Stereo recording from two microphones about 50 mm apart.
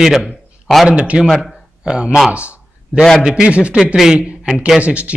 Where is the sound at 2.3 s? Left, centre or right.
Right.